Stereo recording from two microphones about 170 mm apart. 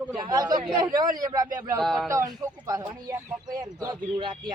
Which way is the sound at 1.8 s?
Centre (ahead or behind).